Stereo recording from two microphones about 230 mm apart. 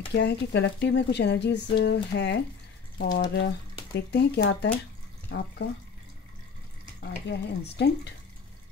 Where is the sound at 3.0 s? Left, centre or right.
Left.